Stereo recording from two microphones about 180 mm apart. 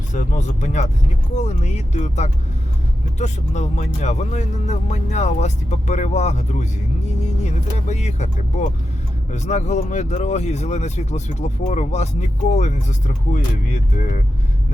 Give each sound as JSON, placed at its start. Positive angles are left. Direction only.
{"t": 0.1, "sound": "speech", "side_deg": 40}